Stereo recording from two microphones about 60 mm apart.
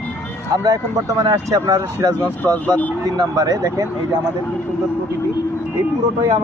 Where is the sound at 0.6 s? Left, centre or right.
Right.